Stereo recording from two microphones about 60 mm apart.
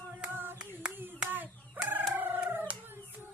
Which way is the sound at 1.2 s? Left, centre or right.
Right.